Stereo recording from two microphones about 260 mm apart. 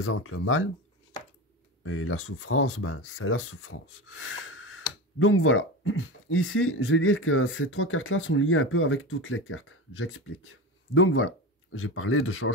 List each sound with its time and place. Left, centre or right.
0.0 s speech: left
1.8 s speech: left